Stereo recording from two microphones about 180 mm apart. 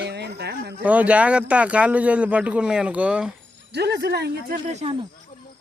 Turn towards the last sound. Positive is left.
turn(degrees=-30)  # may be behind; listen again after turning